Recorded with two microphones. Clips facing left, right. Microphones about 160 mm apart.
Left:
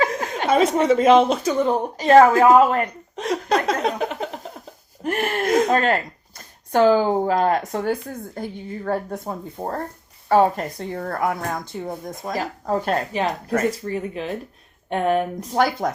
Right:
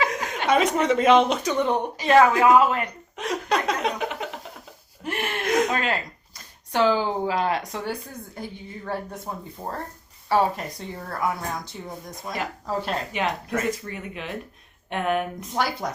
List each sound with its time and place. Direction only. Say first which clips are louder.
0.0 s speech: left 3 dB; 30° left (ahead or behind); by 12.3 s 50° left (ahead or behind)
13.1 s speech: left 4 dB; 40° left (ahead or behind)
15.5 s speech: left 6 dB; 50° left (ahead or behind)